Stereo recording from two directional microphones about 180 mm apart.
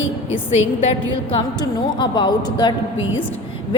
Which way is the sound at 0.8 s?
35° left (ahead or behind).